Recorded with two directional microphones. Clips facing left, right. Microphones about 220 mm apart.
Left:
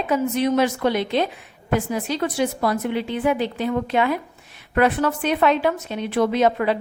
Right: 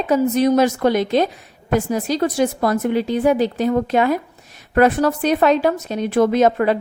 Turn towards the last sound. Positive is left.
turn(degrees=-45)  # may be behind; listen again after turning